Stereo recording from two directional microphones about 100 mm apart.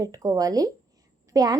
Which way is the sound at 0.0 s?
35° right (ahead or behind).